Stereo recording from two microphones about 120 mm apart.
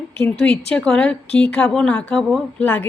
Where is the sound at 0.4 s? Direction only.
5° left (ahead or behind).